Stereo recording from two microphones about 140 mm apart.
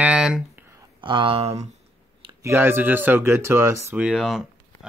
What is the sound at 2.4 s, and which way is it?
Speech, 15° right (ahead or behind).